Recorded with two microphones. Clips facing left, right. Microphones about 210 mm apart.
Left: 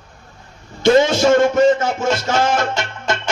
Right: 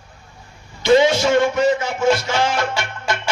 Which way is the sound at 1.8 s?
45° left (ahead or behind).